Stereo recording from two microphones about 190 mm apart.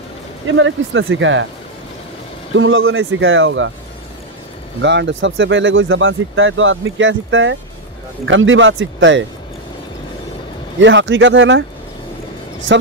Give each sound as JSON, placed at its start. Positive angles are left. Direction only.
{"t": 0.6, "sound": "speech", "side_deg": -90}
{"t": 2.5, "sound": "speech", "side_deg": -90}
{"t": 4.8, "sound": "speech", "side_deg": -70}
{"t": 10.8, "sound": "speech", "side_deg": -75}
{"t": 12.7, "sound": "speech", "side_deg": -90}